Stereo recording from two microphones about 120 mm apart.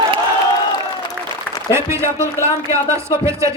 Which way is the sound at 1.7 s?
20° right (ahead or behind).